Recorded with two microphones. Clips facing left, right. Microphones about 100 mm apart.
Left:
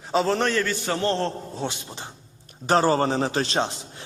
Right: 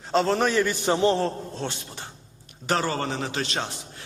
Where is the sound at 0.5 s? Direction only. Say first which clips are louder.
Right 2 dB; 15° right (ahead or behind).